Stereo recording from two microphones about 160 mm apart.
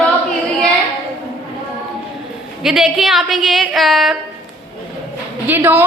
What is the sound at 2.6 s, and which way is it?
A woman's voice, 5° right (ahead or behind).